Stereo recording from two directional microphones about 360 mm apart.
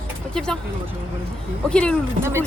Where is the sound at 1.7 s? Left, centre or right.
Centre.